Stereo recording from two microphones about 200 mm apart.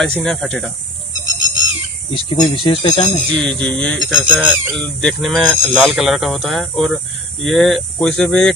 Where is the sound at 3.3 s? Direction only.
5° left (ahead or behind).